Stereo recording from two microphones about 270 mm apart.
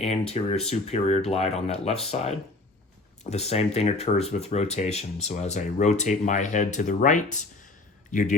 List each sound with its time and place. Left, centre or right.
0.0 s speech: left